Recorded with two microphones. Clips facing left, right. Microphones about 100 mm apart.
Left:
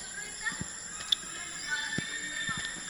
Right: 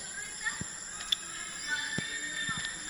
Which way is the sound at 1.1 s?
15° left (ahead or behind).